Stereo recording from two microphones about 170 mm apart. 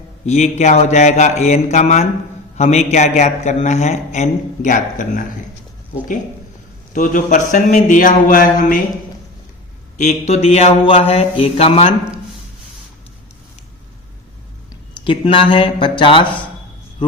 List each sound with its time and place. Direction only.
0.3 s a man's voice: 40° left (ahead or behind)
6.9 s a man's voice: 50° left (ahead or behind)
10.0 s mantra: 40° left (ahead or behind)
14.7 s speech: 30° left (ahead or behind)